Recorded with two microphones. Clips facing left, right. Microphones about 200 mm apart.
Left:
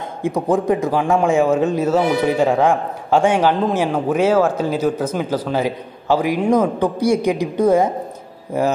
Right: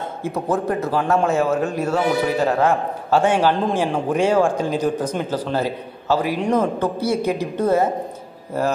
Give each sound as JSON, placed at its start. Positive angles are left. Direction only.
{"t": 0.2, "sound": "a man's voice", "side_deg": 15}